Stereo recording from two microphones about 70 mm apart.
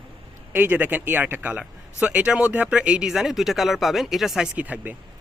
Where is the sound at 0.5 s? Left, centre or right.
Right.